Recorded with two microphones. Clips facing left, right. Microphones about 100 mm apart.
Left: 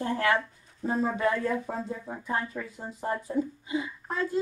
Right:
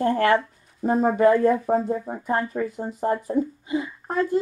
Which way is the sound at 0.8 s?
55° right (ahead or behind).